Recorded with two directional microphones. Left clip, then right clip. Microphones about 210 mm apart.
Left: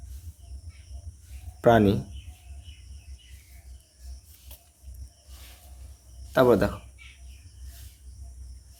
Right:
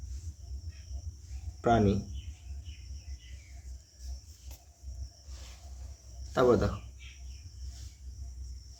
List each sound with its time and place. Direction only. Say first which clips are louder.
1.6 s speech: left 7 dB; 45° left (ahead or behind)
6.3 s speech: left 5 dB; 35° left (ahead or behind)